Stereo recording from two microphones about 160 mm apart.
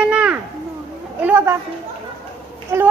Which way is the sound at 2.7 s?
15° right (ahead or behind).